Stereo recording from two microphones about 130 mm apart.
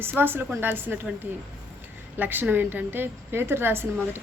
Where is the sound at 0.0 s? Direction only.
15° right (ahead or behind).